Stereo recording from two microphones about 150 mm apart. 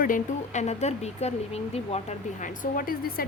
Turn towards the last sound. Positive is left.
turn(degrees=70)  # may be behind; listen again after turning